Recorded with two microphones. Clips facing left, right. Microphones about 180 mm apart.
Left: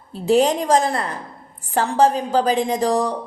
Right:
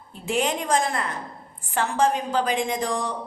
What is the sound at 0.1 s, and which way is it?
A woman's voice, 35° left (ahead or behind).